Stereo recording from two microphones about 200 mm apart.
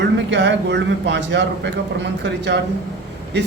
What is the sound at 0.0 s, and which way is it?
A man's voice, 60° right (ahead or behind).